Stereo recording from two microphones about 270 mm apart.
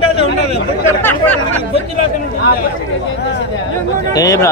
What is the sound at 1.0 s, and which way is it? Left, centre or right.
Speech, centre.